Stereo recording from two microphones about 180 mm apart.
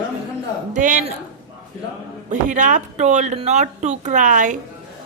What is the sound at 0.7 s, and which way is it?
Speech, 45° right (ahead or behind).